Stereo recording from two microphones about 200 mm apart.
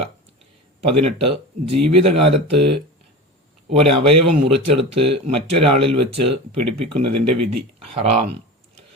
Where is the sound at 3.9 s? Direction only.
30° right (ahead or behind).